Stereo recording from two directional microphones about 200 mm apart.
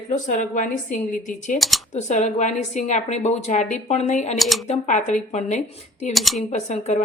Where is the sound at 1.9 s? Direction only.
35° left (ahead or behind).